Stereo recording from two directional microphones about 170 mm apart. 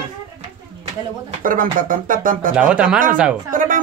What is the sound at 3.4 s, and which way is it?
Speech, 55° right (ahead or behind).